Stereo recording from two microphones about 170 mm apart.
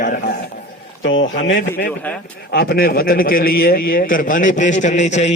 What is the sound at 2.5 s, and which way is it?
A man's voice, 70° left (ahead or behind).